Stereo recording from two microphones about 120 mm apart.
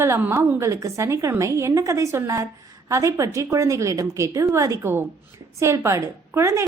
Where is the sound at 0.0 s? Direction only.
20° right (ahead or behind).